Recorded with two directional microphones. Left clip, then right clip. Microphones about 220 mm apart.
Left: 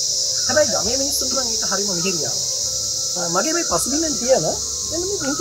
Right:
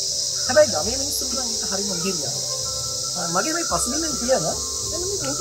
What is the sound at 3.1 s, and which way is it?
Cricket, 45° left (ahead or behind).